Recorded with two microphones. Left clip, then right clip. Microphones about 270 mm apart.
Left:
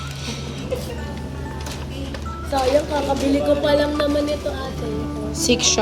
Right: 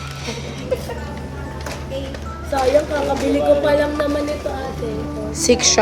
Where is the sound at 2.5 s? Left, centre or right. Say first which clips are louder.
Right 2 dB; centre.